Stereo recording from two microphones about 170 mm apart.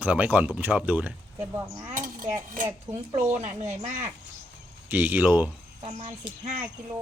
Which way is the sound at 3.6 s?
40° right (ahead or behind).